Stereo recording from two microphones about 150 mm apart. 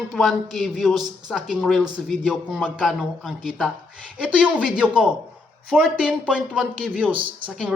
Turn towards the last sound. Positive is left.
turn(degrees=-10)  # may be behind; listen again after turning